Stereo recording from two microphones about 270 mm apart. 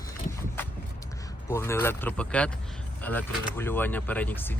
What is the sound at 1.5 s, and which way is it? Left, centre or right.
Speech, centre.